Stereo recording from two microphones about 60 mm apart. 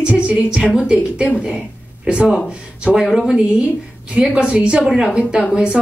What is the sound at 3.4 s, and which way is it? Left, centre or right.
A woman's voice, centre.